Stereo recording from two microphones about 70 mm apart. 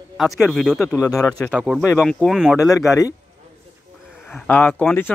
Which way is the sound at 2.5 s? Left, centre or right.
Left.